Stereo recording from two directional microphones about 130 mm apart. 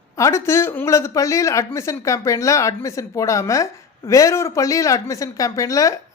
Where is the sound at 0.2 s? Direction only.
20° left (ahead or behind).